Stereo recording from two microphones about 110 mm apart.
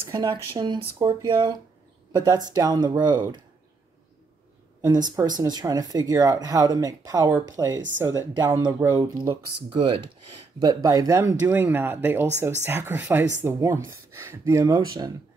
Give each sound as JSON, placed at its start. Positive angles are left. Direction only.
{"t": 0.1, "sound": "speech", "side_deg": -35}
{"t": 0.5, "sound": "speech", "side_deg": -45}
{"t": 4.8, "sound": "speech", "side_deg": -40}
{"t": 9.7, "sound": "speech", "side_deg": -50}
{"t": 10.6, "sound": "speech", "side_deg": -35}